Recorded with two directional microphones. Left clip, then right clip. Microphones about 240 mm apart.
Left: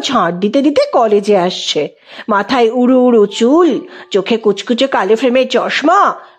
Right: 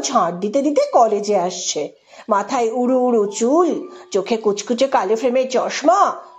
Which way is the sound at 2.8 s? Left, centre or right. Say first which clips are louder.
Left 6 dB; left.